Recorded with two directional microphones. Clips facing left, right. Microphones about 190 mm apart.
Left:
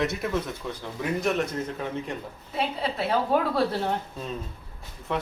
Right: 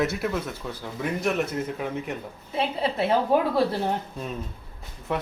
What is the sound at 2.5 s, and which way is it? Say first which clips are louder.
Speech: right 3 dB; 25° right (ahead or behind).